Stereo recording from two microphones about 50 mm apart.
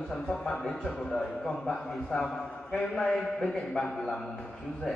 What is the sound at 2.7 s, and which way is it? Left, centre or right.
A man's voice, centre.